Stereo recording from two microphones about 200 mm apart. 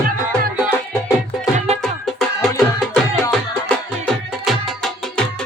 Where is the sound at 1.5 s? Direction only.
30° right (ahead or behind).